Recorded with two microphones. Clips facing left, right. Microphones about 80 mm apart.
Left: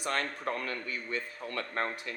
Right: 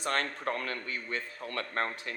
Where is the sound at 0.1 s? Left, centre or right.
Right.